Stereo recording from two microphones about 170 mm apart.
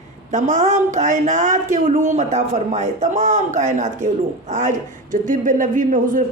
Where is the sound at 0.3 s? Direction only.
45° right (ahead or behind).